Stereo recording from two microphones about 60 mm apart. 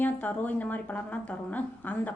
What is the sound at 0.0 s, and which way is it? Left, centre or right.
A woman's voice, left.